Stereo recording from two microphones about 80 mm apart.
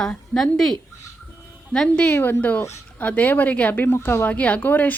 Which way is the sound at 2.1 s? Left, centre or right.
Left.